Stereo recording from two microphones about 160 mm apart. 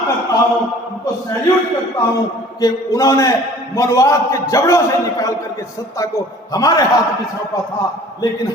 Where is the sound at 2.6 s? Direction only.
25° left (ahead or behind).